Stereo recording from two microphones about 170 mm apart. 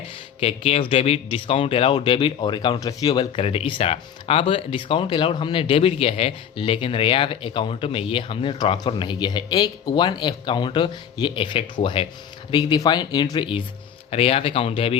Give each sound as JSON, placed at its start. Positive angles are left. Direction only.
{"t": 0.3, "sound": "speech", "side_deg": 35}